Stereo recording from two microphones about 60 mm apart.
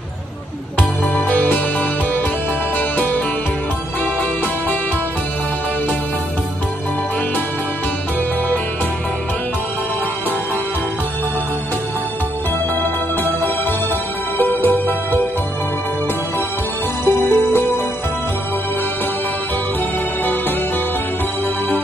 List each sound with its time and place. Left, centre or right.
0.7 s music: left
12.8 s music: left
17.0 s music: left